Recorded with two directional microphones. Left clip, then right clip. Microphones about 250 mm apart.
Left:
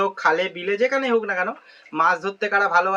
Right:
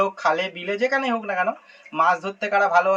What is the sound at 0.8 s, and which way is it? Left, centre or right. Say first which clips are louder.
Speech: left 2 dB; centre.